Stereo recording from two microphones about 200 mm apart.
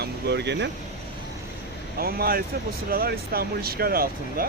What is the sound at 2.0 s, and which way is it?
Speech, 50° right (ahead or behind).